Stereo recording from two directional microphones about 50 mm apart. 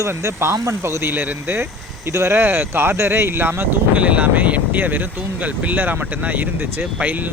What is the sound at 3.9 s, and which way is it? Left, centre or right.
Speech, right.